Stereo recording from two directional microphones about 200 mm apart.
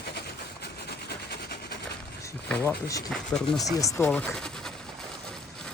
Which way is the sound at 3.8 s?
15° left (ahead or behind).